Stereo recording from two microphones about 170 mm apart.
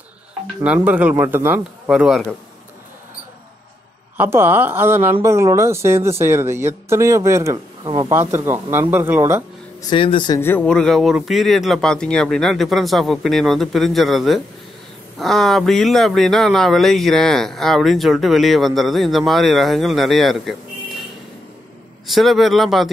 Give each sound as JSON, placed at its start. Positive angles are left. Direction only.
{"t": 0.8, "sound": "speech", "side_deg": -10}
{"t": 4.2, "sound": "speech", "side_deg": -10}
{"t": 8.1, "sound": "speech", "side_deg": -15}
{"t": 9.8, "sound": "speech", "side_deg": 25}
{"t": 10.4, "sound": "speech", "side_deg": 10}
{"t": 22.0, "sound": "speech", "side_deg": 0}